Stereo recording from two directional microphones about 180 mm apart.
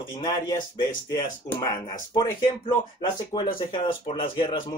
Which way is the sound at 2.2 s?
20° left (ahead or behind).